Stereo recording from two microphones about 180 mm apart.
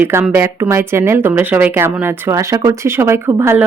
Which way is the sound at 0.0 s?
10° right (ahead or behind).